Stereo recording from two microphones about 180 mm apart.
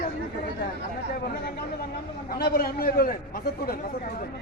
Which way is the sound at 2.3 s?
60° left (ahead or behind).